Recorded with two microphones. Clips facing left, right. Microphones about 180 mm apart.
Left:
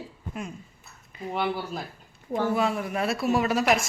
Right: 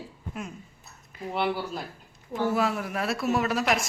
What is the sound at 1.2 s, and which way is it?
A woman's voice, centre (ahead or behind).